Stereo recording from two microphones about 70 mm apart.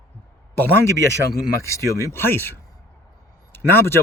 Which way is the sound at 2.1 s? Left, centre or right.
Left.